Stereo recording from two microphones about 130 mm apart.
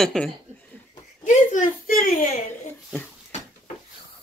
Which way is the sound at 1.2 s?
80° left.